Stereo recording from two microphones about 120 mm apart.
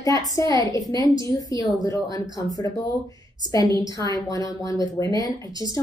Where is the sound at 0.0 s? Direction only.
30° left (ahead or behind).